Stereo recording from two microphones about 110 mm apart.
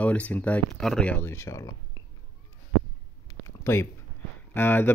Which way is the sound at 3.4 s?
25° left (ahead or behind).